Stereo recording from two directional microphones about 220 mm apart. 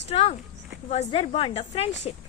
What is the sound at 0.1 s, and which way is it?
A woman's voice, 30° left (ahead or behind).